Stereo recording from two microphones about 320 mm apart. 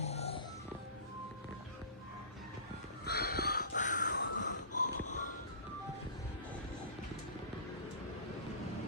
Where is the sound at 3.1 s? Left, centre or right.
Left.